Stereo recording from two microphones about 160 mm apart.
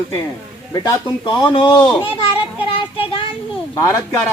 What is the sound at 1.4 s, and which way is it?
A man's voice, 25° left (ahead or behind).